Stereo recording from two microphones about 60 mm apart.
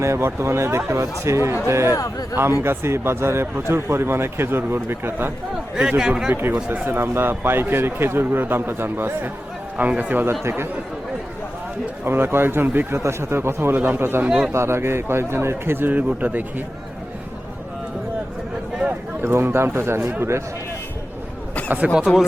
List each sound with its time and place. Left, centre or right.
0.0 s a man's voice: right
1.9 s a man's voice: left
2.3 s a man's voice: right
6.0 s speech: centre
6.3 s a man's voice: right
9.7 s speech: right
12.0 s a man's voice: right
13.0 s a man's voice: right
14.3 s speech: centre
14.5 s a man's voice: right
19.2 s a man's voice: right
22.0 s speech: centre